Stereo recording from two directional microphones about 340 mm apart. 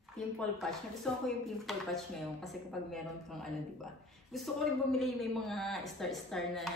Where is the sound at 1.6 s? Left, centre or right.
Centre.